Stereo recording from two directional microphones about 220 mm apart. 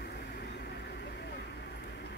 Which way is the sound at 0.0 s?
45° left (ahead or behind).